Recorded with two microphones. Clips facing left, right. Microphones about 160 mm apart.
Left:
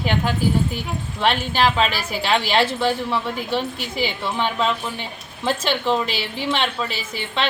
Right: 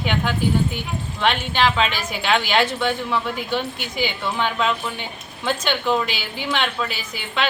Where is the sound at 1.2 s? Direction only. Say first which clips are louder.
Left 1 dB; 35° left (ahead or behind).